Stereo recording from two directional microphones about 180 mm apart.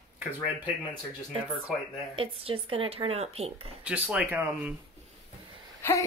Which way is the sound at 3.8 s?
5° right (ahead or behind).